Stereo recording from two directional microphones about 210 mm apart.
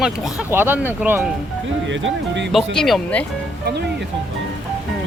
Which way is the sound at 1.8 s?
60° right (ahead or behind).